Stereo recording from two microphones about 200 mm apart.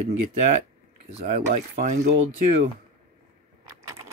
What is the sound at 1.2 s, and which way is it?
Speech, 40° right (ahead or behind).